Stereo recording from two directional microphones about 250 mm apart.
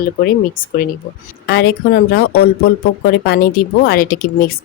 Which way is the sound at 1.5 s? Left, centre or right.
Left.